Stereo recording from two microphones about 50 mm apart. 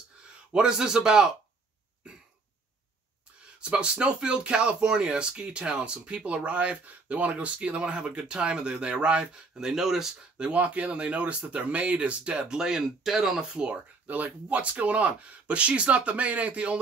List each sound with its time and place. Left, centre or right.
0.5 s speech: centre
3.7 s speech: centre
10.3 s speech: right
14.0 s speech: right